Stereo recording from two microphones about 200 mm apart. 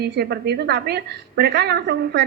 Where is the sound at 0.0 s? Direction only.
55° right (ahead or behind).